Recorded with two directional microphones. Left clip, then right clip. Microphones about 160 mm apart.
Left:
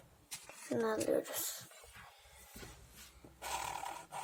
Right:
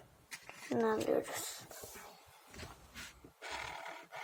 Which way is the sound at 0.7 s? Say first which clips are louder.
Right 1 dB; 5° right (ahead or behind).